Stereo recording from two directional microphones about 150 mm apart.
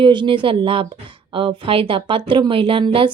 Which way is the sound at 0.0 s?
30° right (ahead or behind).